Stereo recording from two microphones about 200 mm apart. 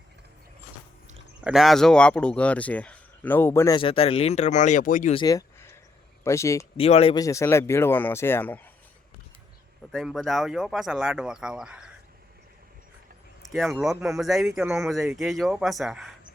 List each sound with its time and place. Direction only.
1.5 s speech: centre (ahead or behind)
3.8 s speech: 25° left (ahead or behind)
5.1 s speech: 20° left (ahead or behind)
6.7 s speech: 30° left (ahead or behind)
7.2 s speech: 15° left (ahead or behind)
9.9 s speech: centre (ahead or behind)
13.5 s speech: centre (ahead or behind)